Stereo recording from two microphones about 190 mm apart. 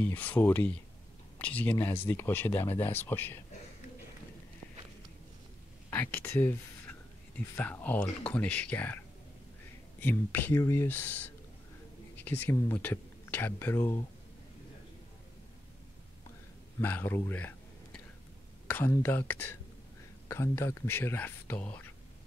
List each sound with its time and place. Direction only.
0.0 s speech: 10° left (ahead or behind)
5.9 s speech: 10° left (ahead or behind)
16.8 s speech: 10° left (ahead or behind)